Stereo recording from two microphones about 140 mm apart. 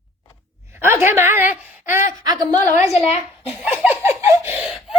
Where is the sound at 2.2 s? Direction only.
30° right (ahead or behind).